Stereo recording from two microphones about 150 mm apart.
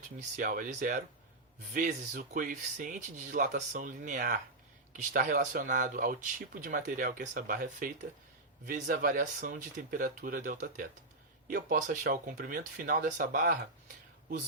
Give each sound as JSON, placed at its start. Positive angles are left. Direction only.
{"t": 0.2, "sound": "speech", "side_deg": -60}